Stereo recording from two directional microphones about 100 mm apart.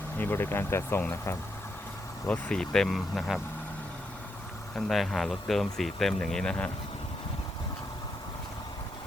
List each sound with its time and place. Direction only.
0.2 s speech: 20° left (ahead or behind)
2.2 s speech: 10° left (ahead or behind)
4.7 s speech: centre (ahead or behind)